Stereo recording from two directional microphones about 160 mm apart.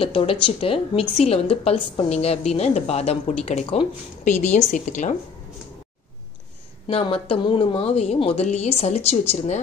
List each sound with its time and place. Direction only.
0.0 s a woman's voice: 35° left (ahead or behind); by 5.1 s 50° left (ahead or behind)
6.9 s a woman's voice: 35° left (ahead or behind)